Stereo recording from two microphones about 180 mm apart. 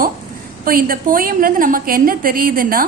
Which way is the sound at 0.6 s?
55° right (ahead or behind).